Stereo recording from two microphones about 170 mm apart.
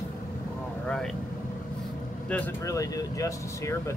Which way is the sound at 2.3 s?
20° left (ahead or behind).